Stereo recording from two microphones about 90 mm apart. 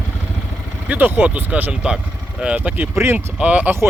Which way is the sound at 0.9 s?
20° right (ahead or behind).